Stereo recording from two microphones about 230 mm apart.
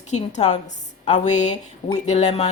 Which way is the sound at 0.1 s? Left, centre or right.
Left.